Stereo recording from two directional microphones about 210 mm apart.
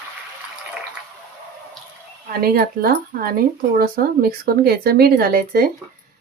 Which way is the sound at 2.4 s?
45° right (ahead or behind).